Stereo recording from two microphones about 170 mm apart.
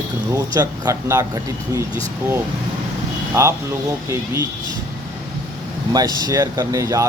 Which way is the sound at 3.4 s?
15° right (ahead or behind).